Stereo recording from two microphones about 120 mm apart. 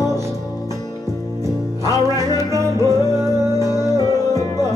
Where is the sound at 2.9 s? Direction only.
25° right (ahead or behind).